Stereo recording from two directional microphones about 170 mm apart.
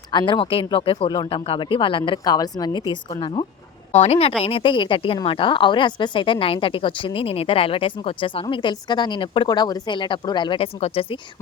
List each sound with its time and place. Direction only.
0.1 s a woman's voice: 25° left (ahead or behind)